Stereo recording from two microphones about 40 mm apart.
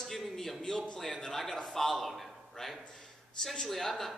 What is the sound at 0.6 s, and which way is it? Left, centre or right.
A man's voice, centre.